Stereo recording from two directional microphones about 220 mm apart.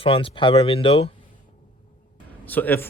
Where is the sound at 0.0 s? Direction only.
25° left (ahead or behind).